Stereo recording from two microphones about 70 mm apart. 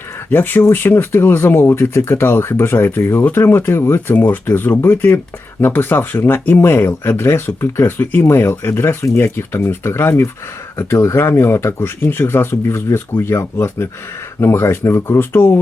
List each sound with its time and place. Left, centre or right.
0.3 s speech: left